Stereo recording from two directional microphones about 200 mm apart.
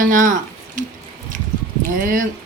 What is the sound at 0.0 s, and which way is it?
Speech, 40° right (ahead or behind).